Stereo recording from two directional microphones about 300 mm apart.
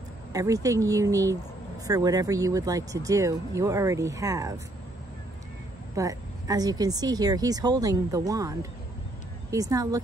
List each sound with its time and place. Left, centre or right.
0.3 s speech: centre
5.9 s speech: centre